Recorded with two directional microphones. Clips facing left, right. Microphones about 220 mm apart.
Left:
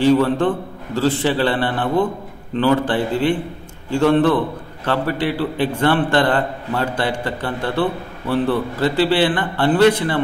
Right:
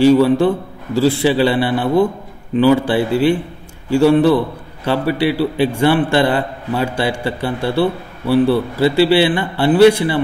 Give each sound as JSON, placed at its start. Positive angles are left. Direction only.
{"t": 0.0, "sound": "a man's voice", "side_deg": -10}